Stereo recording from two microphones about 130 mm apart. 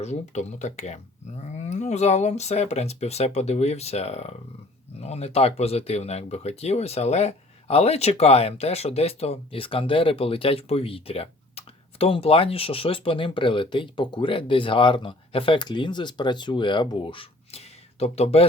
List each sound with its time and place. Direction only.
0.0 s speech: 60° left (ahead or behind)